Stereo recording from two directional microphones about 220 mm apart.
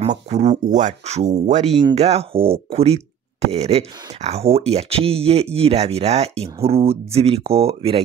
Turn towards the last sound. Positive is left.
turn(degrees=-25)  # may be behind; listen again after turning